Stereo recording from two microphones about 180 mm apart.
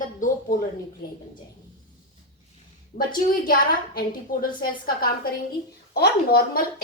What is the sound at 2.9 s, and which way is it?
A woman's voice, 50° left (ahead or behind).